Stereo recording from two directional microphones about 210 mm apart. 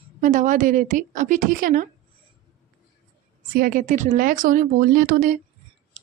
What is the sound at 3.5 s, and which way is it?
A woman's voice, 40° right (ahead or behind).